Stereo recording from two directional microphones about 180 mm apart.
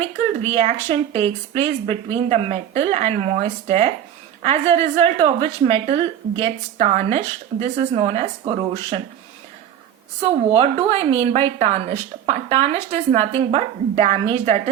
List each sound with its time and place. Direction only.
0.4 s a woman's voice: 35° right (ahead or behind)
10.5 s a woman's voice: 30° right (ahead or behind)